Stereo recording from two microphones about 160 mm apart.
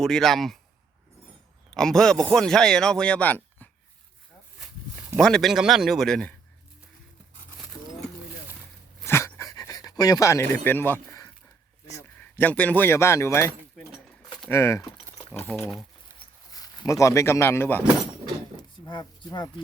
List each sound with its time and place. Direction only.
0.0 s speech: centre (ahead or behind)
1.7 s speech: 5° left (ahead or behind)
5.1 s speech: 5° left (ahead or behind)
9.0 s pant: 15° left (ahead or behind)
11.9 s speech: 10° left (ahead or behind)
14.5 s speech: 20° left (ahead or behind)
16.1 s a sound: 25° left (ahead or behind)
18.5 s a sound: 25° left (ahead or behind)